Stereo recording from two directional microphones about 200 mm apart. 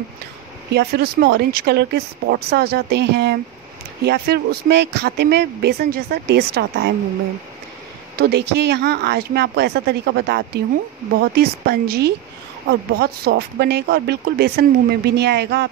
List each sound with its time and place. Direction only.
0.7 s speech: 55° right (ahead or behind)
8.2 s speech: 55° right (ahead or behind)